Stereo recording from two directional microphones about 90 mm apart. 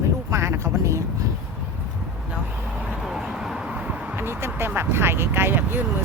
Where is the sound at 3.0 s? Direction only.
5° right (ahead or behind).